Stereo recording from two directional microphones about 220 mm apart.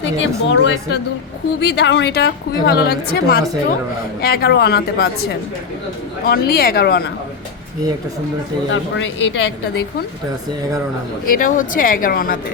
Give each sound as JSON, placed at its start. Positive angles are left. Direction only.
{"t": 0.2, "sound": "a woman's voice", "side_deg": 55}
{"t": 8.7, "sound": "a woman's voice", "side_deg": 60}
{"t": 11.3, "sound": "speech", "side_deg": 35}